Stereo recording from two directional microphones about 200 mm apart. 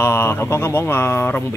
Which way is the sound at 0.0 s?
10° left (ahead or behind).